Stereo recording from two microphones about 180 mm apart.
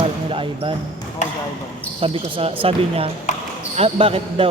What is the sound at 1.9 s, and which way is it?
Speech, 30° right (ahead or behind).